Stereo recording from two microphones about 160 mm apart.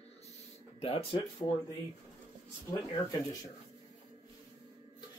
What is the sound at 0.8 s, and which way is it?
Speech, 35° left (ahead or behind).